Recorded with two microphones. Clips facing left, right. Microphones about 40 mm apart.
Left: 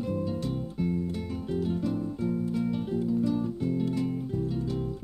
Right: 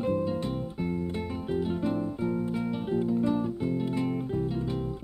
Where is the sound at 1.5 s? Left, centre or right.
Right.